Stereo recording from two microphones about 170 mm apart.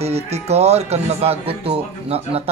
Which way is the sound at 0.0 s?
40° right (ahead or behind).